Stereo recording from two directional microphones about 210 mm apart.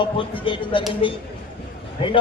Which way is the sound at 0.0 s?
25° left (ahead or behind).